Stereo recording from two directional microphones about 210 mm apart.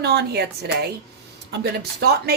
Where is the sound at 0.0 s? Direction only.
50° right (ahead or behind).